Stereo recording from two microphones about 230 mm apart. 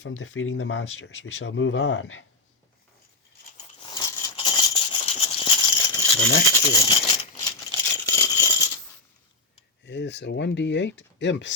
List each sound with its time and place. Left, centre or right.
0.0 s speech: left
3.9 s a sound: centre
6.1 s speech: centre
6.6 s rattle: centre
9.8 s speech: left